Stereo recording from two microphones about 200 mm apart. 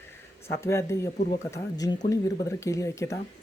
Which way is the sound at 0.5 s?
15° left (ahead or behind).